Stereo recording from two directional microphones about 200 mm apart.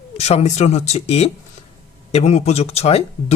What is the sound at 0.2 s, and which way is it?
Speech, 30° left (ahead or behind).